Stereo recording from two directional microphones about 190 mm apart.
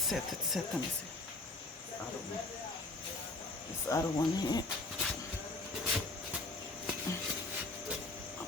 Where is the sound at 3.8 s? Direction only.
20° left (ahead or behind).